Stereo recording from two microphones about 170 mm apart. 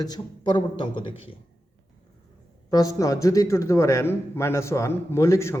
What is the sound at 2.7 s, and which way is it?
A man's voice, 20° left (ahead or behind).